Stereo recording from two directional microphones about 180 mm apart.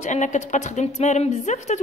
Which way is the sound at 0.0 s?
40° left (ahead or behind).